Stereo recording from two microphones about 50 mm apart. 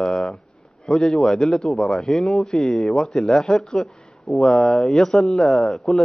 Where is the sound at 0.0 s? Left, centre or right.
Centre.